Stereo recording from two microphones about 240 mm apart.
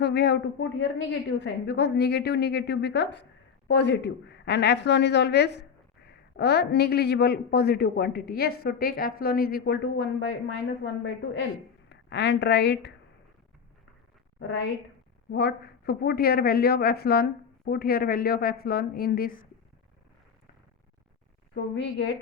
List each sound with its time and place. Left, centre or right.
0.0 s a man's voice: left
11.9 s speech: left
14.3 s a man's voice: left
21.5 s a man's voice: left